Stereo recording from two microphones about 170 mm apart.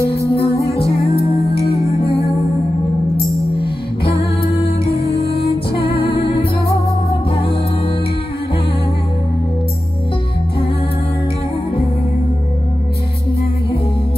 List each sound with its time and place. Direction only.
0.4 s music: 20° left (ahead or behind)
4.4 s music: 35° left (ahead or behind)
5.1 s music: 70° left (ahead or behind)
5.9 s music: 30° left (ahead or behind)